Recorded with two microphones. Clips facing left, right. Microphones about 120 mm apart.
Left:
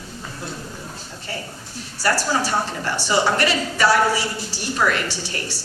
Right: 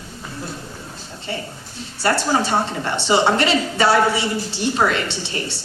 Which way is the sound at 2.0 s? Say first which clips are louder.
Right 2 dB; 25° right (ahead or behind).